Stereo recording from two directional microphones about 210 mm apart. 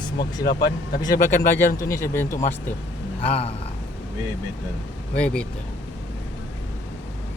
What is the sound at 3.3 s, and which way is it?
Speech, 30° left (ahead or behind).